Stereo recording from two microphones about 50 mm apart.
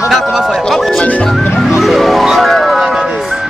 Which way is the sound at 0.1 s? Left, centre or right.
Centre.